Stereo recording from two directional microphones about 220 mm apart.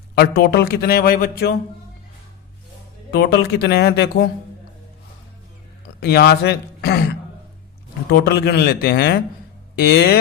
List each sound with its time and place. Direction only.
0.2 s speech: 45° left (ahead or behind)
3.1 s speech: 50° left (ahead or behind)
6.0 s speech: 50° left (ahead or behind)
8.3 s speech: 45° left (ahead or behind)